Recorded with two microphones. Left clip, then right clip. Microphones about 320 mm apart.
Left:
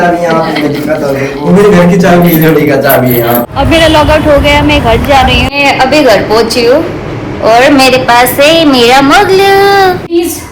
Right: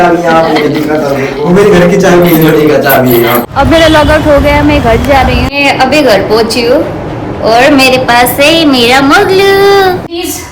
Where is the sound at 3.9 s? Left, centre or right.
Centre.